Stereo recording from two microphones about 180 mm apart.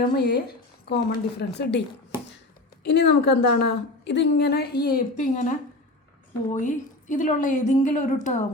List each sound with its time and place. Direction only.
0.0 s a woman's voice: 60° left (ahead or behind)
2.8 s a woman's voice: 65° left (ahead or behind); by 8.4 s 45° left (ahead or behind)